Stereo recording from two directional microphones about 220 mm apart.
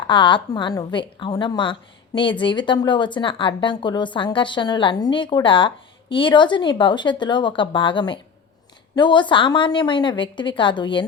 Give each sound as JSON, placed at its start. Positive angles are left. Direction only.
{"t": 0.1, "sound": "speech", "side_deg": 20}